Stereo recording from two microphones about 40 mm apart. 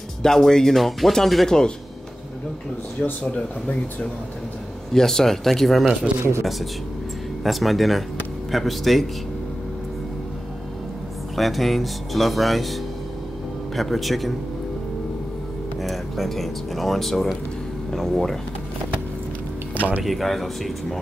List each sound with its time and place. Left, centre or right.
0.2 s speech: centre
0.7 s speech: centre
3.3 s speech: left
4.9 s speech: centre
6.1 s speech: right
7.4 s speech: centre
11.3 s speech: centre
13.7 s speech: centre
15.8 s speech: centre
20.0 s speech: centre